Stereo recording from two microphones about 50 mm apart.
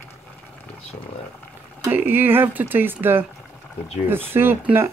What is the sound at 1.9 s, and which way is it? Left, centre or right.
Speech, right.